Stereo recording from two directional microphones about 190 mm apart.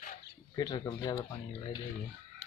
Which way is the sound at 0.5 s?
20° left (ahead or behind).